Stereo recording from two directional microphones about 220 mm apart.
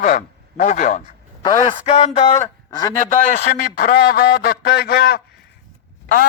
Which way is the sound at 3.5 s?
45° left (ahead or behind).